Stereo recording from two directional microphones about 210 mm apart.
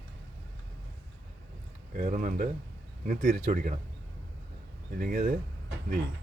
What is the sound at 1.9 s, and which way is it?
Speech, 40° right (ahead or behind).